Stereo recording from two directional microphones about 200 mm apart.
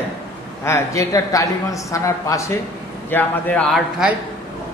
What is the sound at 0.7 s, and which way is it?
A man's voice, 15° left (ahead or behind).